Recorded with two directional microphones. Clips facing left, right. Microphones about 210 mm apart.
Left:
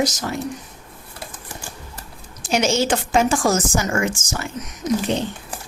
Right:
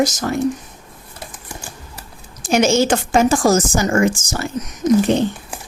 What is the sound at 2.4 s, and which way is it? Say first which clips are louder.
A woman's voice: right 5 dB; 50° right (ahead or behind).